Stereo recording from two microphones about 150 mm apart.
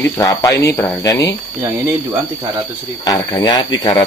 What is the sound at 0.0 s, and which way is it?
Speech, 25° left (ahead or behind).